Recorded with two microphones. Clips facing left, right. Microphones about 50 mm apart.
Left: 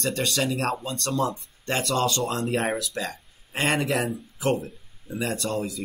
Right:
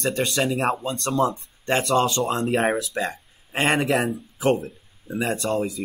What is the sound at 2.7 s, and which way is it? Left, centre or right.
Speech, centre.